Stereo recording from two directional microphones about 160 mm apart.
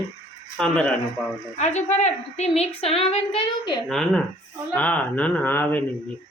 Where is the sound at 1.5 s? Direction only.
45° left (ahead or behind).